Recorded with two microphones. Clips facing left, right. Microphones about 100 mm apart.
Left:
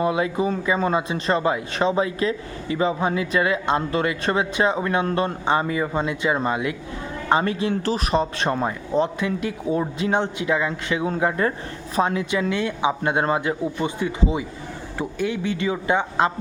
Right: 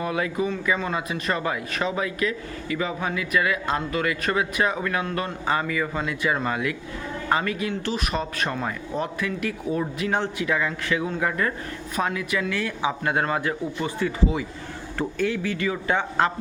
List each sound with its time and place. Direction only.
0.0 s speech: 25° left (ahead or behind)